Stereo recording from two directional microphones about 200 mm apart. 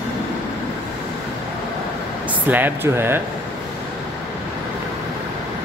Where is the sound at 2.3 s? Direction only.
10° right (ahead or behind).